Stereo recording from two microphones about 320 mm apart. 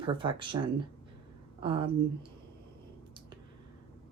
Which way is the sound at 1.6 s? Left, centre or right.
Centre.